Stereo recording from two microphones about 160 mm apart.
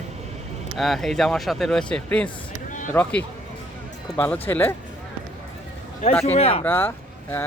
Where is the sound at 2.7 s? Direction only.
55° left (ahead or behind).